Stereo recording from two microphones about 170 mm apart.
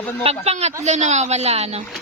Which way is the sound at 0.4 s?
40° right (ahead or behind).